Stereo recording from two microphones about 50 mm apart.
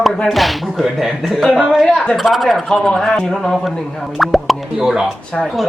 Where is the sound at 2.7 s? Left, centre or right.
Centre.